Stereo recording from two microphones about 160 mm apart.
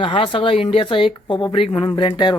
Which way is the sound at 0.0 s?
30° left (ahead or behind).